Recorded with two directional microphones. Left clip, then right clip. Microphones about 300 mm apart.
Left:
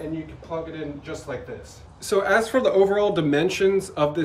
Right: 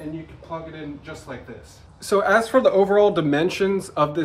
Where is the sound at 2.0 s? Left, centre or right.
Centre.